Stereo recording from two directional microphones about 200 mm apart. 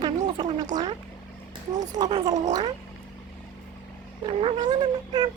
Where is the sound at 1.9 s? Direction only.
20° right (ahead or behind).